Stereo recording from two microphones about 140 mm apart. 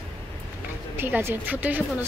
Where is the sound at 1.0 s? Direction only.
15° right (ahead or behind).